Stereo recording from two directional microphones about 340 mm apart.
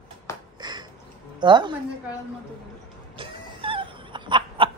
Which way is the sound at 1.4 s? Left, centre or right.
Centre.